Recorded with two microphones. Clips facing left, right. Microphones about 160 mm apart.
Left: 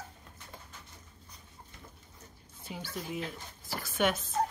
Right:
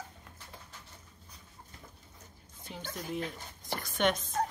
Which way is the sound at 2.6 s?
10° left (ahead or behind).